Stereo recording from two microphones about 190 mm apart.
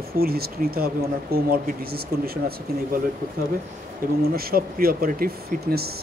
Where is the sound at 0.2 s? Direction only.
55° right (ahead or behind).